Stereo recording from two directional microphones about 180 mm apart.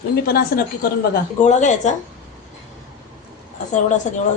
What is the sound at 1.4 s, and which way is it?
Speech, 40° left (ahead or behind).